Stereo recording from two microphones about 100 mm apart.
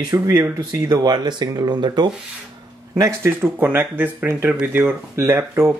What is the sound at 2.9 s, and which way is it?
Speech, 25° right (ahead or behind).